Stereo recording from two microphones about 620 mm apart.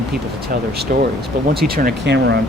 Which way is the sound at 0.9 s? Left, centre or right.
Centre.